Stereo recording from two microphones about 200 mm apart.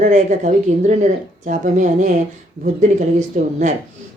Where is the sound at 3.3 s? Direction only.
40° right (ahead or behind).